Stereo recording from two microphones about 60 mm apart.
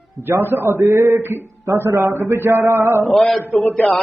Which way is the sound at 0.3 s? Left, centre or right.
Right.